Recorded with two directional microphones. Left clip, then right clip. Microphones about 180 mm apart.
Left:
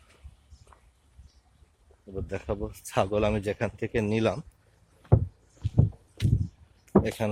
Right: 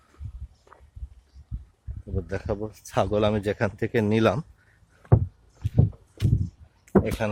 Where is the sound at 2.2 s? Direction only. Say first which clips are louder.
Right 2 dB; 5° right (ahead or behind); by 4.4 s 25° right (ahead or behind).